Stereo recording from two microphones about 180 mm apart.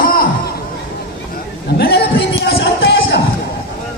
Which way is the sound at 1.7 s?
65° left (ahead or behind).